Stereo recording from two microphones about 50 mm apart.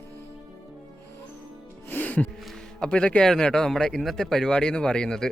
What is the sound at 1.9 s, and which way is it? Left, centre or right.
Music, left.